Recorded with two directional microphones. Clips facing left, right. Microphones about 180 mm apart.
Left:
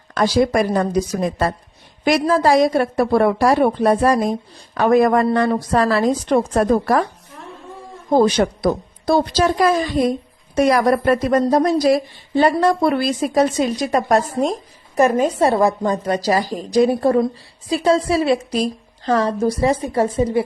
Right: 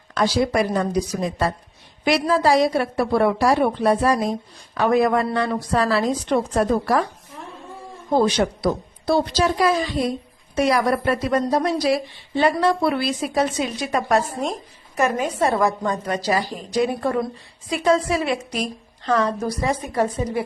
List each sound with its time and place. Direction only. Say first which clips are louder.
0.1 s a woman's voice: left 4 dB; 50° left (ahead or behind)
8.1 s a woman's voice: left 4 dB; 45° left (ahead or behind); by 20.4 s 30° left (ahead or behind)